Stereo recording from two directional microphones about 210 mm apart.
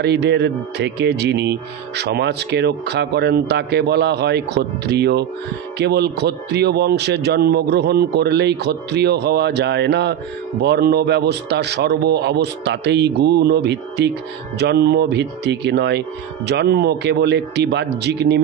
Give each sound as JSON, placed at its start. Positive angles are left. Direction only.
{"t": 0.0, "sound": "speech", "side_deg": -55}